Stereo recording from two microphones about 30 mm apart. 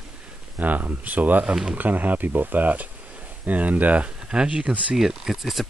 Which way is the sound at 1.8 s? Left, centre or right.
Right.